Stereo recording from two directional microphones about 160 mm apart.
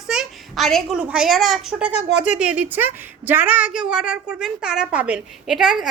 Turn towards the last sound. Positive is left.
turn(degrees=0)  # may be behind; listen again after turning